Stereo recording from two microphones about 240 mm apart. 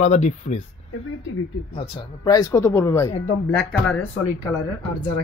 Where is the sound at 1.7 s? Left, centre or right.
Left; by 4.6 s centre.